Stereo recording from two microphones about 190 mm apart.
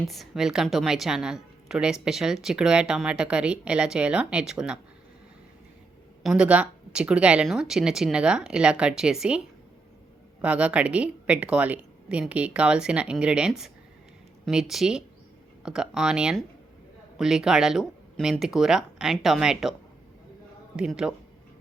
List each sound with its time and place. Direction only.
0.0 s a woman's voice: centre (ahead or behind)
6.2 s a woman's voice: 5° right (ahead or behind)
10.4 s a woman's voice: 5° right (ahead or behind)
20.7 s a woman's voice: 5° right (ahead or behind)